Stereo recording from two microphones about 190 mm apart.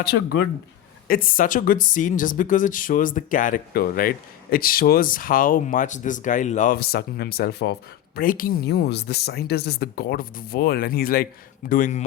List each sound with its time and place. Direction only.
0.0 s speech: 55° left (ahead or behind)